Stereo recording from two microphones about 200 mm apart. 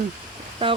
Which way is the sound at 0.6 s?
25° right (ahead or behind).